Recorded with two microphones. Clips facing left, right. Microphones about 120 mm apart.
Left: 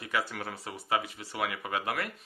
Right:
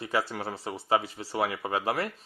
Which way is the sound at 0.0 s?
30° right (ahead or behind).